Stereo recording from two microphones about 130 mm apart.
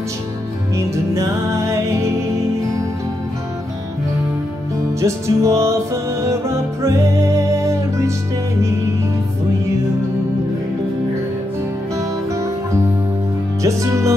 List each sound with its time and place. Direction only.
0.7 s music: 25° right (ahead or behind)
5.0 s music: 25° right (ahead or behind)
13.6 s music: 25° right (ahead or behind)